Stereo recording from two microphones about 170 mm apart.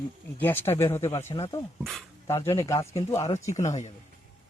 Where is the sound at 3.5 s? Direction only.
45° left (ahead or behind).